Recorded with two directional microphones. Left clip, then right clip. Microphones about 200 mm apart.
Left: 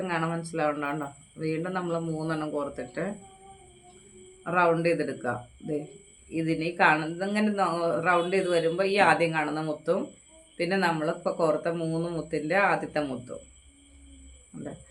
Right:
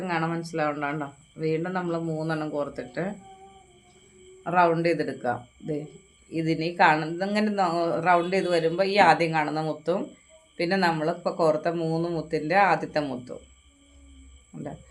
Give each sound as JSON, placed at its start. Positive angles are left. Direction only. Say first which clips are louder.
{"t": 0.0, "sound": "a man's voice", "louder": "right 2 dB", "side_deg": -20}
{"t": 4.4, "sound": "a man's voice", "louder": "right 2 dB", "side_deg": -25}